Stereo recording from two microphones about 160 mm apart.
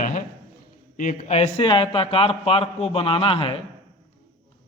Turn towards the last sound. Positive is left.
turn(degrees=35)  # may be behind; listen again after turning